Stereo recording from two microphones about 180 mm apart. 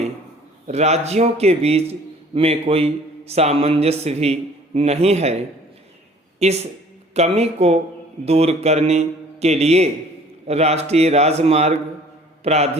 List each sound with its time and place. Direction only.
0.7 s a man's voice: 35° right (ahead or behind)
12.4 s mantra: 35° right (ahead or behind)